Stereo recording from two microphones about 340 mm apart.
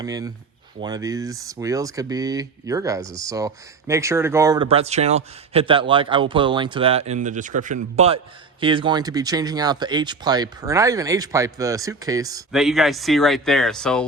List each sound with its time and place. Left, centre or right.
0.0 s speech: centre